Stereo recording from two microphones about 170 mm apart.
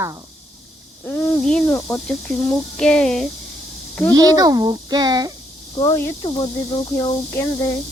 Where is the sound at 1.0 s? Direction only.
10° left (ahead or behind).